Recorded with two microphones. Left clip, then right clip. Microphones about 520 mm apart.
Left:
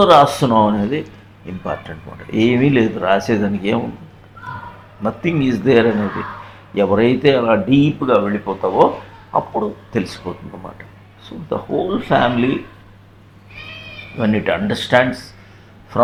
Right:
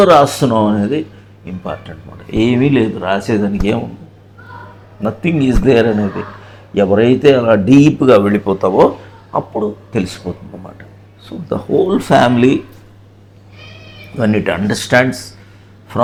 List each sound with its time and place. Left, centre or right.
0.0 s speech: centre
2.3 s speech: centre
5.0 s speech: centre; by 8.9 s right
9.3 s speech: centre
11.4 s speech: right
14.2 s speech: centre